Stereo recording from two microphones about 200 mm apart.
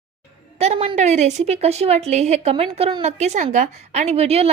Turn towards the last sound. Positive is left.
turn(degrees=-30)  # may be behind; listen again after turning